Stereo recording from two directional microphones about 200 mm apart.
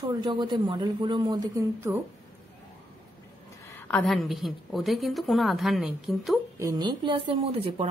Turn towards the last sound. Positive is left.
turn(degrees=-30)  # may be behind; listen again after turning